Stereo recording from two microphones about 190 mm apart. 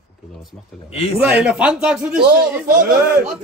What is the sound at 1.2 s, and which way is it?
Speech, 5° right (ahead or behind).